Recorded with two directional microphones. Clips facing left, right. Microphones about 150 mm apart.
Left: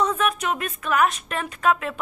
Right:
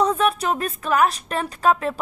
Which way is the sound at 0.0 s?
35° right (ahead or behind).